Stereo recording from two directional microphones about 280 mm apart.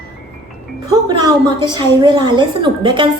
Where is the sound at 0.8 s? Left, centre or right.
Centre.